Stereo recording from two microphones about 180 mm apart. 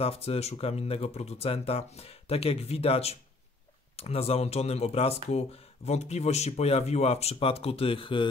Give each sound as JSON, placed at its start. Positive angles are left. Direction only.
{"t": 0.0, "sound": "speech", "side_deg": 35}